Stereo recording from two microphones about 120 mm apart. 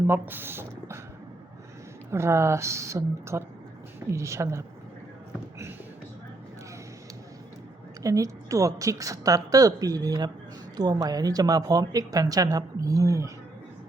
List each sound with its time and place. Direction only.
0.1 s speech: 15° right (ahead or behind)
2.0 s a woman's voice: 20° right (ahead or behind)
8.0 s a woman's voice: 30° right (ahead or behind)